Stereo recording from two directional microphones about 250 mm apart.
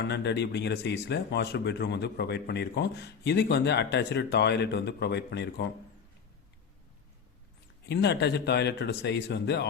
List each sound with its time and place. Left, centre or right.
0.0 s speech: left
7.9 s speech: left